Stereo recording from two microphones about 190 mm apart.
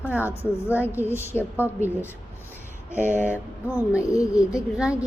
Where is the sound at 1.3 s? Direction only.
5° left (ahead or behind).